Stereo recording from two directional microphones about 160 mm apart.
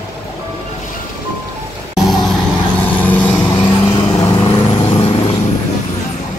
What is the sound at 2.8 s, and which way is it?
Vehicle, 10° left (ahead or behind).